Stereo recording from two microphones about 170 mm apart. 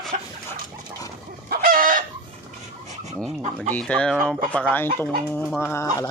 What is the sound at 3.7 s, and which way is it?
Chicken, 5° left (ahead or behind).